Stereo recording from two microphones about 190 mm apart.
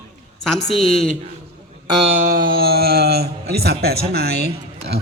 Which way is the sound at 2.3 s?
50° right (ahead or behind).